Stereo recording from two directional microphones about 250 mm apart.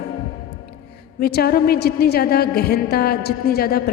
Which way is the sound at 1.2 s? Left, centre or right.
Left.